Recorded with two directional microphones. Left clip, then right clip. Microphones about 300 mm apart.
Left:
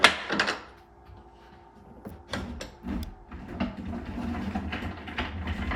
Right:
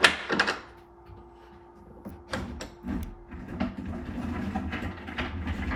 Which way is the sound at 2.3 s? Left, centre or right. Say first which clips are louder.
Right 1 dB; centre.